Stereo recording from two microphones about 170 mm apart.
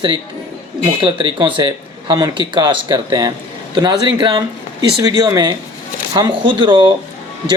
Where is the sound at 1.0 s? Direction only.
30° right (ahead or behind).